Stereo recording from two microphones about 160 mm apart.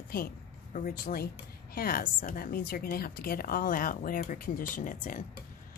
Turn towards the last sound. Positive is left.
turn(degrees=55)  # may be behind; listen again after turning